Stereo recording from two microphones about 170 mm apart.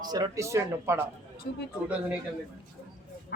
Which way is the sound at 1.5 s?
65° left (ahead or behind).